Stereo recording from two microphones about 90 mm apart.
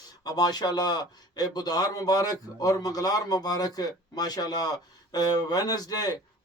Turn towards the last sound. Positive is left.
turn(degrees=45)  # may be behind; listen again after turning